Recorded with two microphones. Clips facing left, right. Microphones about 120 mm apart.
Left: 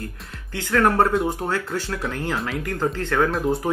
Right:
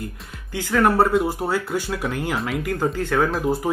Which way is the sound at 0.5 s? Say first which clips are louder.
Right 1 dB; 10° right (ahead or behind).